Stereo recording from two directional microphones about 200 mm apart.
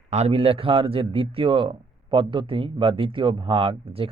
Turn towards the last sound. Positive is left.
turn(degrees=-25)  # may be behind; listen again after turning